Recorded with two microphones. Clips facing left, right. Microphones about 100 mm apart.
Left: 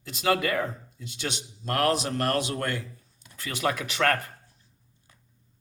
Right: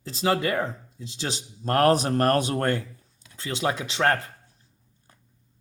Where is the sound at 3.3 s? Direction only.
25° right (ahead or behind).